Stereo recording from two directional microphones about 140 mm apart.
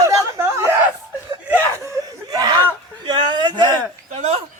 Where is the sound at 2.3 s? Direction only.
25° right (ahead or behind).